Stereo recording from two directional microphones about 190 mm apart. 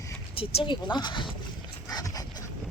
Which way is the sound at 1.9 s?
20° left (ahead or behind).